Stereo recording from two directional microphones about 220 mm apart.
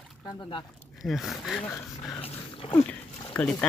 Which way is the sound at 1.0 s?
Centre (ahead or behind).